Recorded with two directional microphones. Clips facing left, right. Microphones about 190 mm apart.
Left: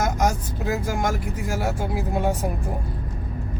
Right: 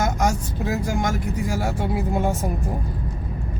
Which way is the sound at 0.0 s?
Centre (ahead or behind).